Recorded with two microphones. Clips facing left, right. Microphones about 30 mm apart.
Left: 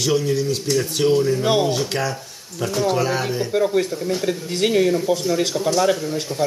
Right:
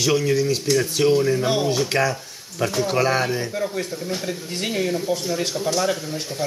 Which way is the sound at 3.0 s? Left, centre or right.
Centre.